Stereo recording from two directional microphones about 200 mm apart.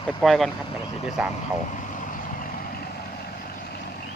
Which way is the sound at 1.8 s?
40° left (ahead or behind).